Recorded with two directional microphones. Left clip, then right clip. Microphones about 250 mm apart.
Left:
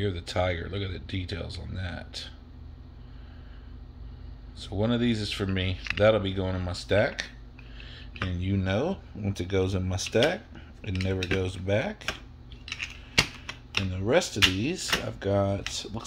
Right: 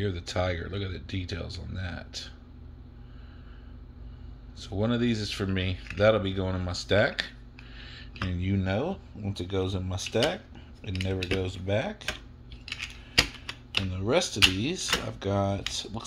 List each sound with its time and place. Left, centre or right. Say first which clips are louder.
0.0 s speech: left 2 dB; centre
4.6 s speech: left 1 dB; centre
7.7 s a sound: right 1 dB; centre
8.2 s speech: left 1 dB; centre
13.5 s speech: even; centre